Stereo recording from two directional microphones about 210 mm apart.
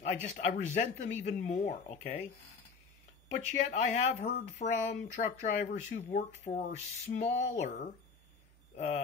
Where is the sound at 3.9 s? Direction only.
35° left (ahead or behind).